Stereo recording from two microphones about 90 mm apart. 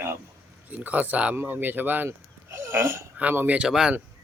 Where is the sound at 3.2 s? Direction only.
15° right (ahead or behind).